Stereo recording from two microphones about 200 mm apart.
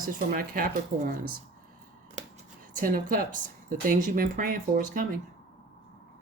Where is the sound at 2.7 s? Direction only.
45° right (ahead or behind).